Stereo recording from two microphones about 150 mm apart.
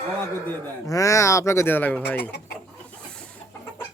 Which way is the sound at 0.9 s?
20° left (ahead or behind).